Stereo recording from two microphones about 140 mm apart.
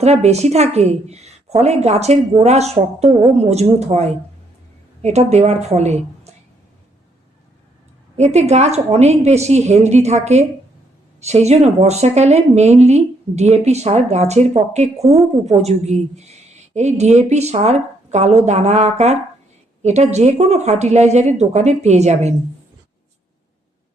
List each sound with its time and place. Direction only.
0.0 s a woman's voice: 50° right (ahead or behind)
8.1 s a woman's voice: 50° right (ahead or behind)